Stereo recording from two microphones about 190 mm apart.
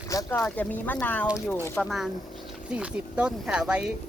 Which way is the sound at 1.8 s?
Centre (ahead or behind).